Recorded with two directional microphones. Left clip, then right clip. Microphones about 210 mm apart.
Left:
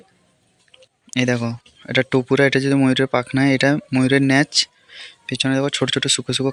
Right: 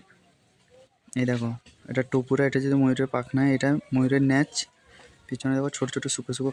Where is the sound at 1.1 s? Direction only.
10° left (ahead or behind).